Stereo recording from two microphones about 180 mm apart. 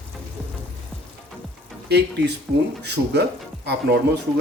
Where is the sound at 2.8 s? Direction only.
65° right (ahead or behind).